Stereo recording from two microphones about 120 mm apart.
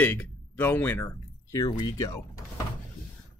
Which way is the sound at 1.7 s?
35° left (ahead or behind).